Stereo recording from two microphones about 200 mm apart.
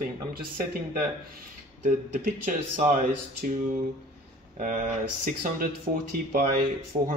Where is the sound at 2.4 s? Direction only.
40° right (ahead or behind).